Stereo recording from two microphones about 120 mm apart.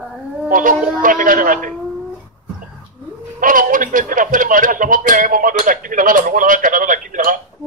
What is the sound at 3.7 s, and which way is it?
A man's voice, 90° right.